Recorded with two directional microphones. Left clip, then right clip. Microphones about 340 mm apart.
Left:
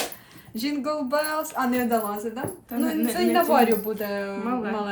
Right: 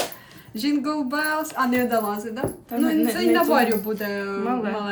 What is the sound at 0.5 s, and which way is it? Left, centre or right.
Speech, centre.